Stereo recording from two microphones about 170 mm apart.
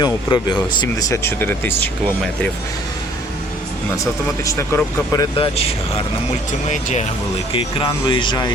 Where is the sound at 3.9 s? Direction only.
20° left (ahead or behind).